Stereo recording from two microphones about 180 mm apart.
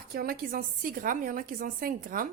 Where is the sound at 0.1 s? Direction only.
55° right (ahead or behind).